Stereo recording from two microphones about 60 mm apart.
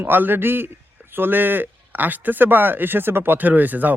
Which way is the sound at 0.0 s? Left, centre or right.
Right.